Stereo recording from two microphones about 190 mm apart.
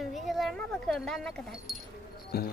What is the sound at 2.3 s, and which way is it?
Speech, 55° left (ahead or behind).